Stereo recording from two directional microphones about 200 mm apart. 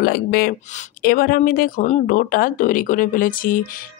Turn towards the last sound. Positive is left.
turn(degrees=45)  # may be behind; listen again after turning